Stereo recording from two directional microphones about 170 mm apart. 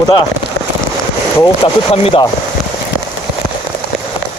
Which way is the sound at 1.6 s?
35° left (ahead or behind).